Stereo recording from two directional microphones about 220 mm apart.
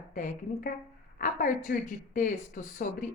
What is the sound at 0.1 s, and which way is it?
A woman's voice, 35° left (ahead or behind).